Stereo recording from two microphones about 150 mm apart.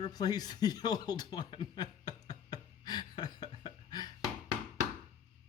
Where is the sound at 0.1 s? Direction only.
25° left (ahead or behind).